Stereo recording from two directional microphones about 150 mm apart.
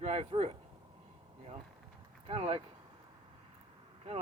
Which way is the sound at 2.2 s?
40° right (ahead or behind).